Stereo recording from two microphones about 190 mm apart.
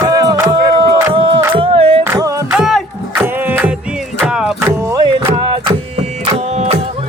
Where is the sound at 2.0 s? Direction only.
15° right (ahead or behind).